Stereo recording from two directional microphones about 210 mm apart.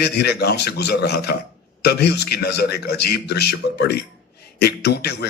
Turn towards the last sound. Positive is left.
turn(degrees=50)  # may be behind; listen again after turning